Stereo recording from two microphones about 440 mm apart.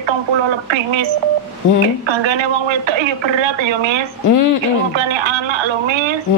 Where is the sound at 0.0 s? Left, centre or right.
Right.